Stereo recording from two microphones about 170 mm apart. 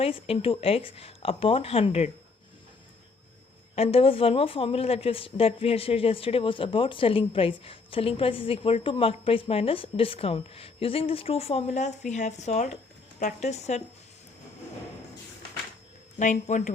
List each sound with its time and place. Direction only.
0.0 s a woman's voice: 35° left (ahead or behind)
3.8 s a woman's voice: 35° left (ahead or behind)
16.1 s speech: 45° left (ahead or behind)